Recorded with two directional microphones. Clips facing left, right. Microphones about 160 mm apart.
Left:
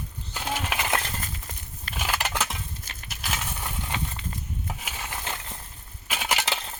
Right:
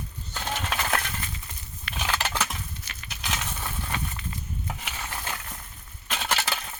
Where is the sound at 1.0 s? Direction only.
40° left (ahead or behind).